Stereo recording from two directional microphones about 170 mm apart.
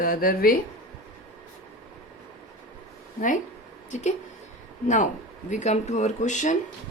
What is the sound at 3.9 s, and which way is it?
Speech, 45° left (ahead or behind).